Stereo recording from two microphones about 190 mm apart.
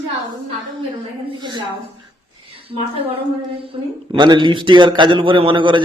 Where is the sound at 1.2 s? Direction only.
25° right (ahead or behind).